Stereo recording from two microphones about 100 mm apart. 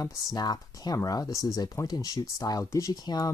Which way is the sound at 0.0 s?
40° left (ahead or behind).